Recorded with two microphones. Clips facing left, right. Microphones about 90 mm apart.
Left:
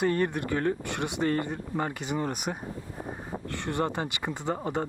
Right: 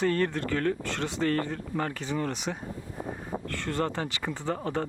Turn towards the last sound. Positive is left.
turn(degrees=15)  # may be behind; listen again after turning